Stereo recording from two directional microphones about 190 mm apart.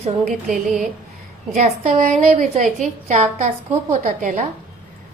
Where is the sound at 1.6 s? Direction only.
35° right (ahead or behind).